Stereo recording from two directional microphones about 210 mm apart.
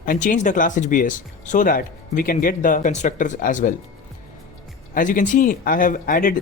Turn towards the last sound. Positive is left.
turn(degrees=40)  # may be behind; listen again after turning